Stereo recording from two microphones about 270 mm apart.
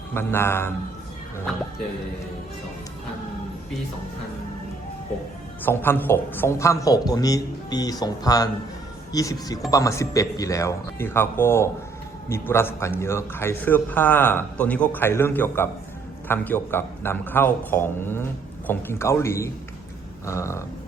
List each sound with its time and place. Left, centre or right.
0.1 s a man's voice: centre
5.6 s a man's voice: centre